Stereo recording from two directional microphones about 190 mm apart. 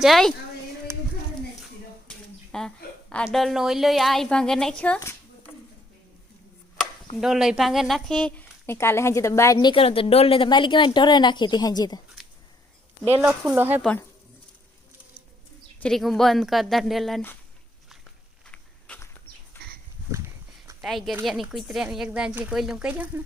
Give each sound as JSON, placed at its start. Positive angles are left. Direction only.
{"t": 0.0, "sound": "speech", "side_deg": 0}
{"t": 2.0, "sound": "a woman's voice", "side_deg": 5}
{"t": 7.2, "sound": "speech", "side_deg": -5}
{"t": 13.2, "sound": "speech", "side_deg": -10}
{"t": 15.8, "sound": "speech", "side_deg": 0}
{"t": 18.5, "sound": "a sound", "side_deg": 10}
{"t": 20.1, "sound": "a sound", "side_deg": -15}
{"t": 20.8, "sound": "speech", "side_deg": 0}